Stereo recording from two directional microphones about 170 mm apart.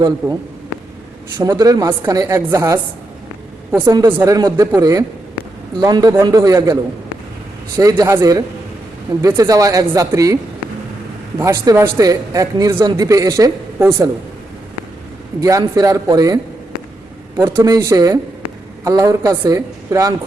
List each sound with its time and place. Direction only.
1.4 s speech: 20° right (ahead or behind)
3.8 s speech: 25° right (ahead or behind)
7.8 s speech: 20° right (ahead or behind)
11.3 s speech: 20° right (ahead or behind)
15.4 s speech: 20° right (ahead or behind)